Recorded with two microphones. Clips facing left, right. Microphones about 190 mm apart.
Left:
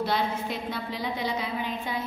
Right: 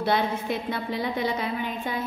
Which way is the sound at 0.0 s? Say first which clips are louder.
Right 3 dB; 55° right (ahead or behind).